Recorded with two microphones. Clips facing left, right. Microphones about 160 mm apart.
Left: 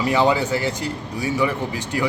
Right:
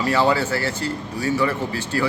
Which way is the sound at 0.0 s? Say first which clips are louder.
Left 1 dB; 15° left (ahead or behind).